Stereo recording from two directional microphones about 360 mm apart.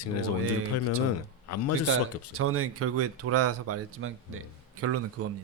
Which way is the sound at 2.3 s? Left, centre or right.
Right.